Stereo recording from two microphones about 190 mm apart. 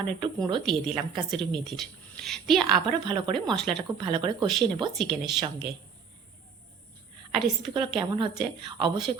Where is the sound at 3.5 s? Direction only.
Centre (ahead or behind).